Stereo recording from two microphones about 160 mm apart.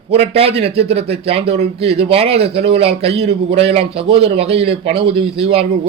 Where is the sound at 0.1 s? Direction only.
40° right (ahead or behind).